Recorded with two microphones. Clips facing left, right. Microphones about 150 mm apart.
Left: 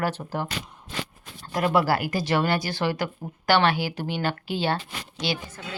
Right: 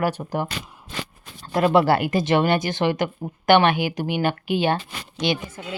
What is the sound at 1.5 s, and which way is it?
Speech, 25° right (ahead or behind).